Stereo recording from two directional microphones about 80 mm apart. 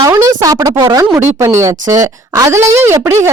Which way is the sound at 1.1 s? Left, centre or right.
Right.